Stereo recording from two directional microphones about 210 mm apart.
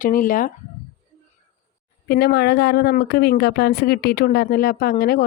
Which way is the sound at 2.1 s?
50° left (ahead or behind).